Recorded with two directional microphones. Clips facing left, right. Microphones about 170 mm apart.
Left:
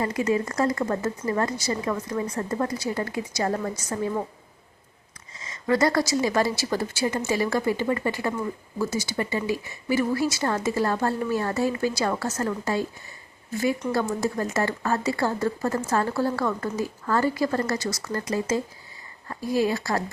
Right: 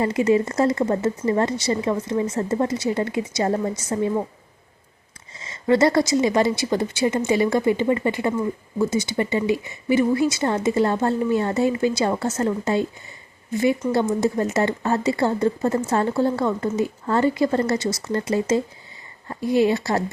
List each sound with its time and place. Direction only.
0.0 s speech: 25° right (ahead or behind)
5.4 s speech: 25° right (ahead or behind)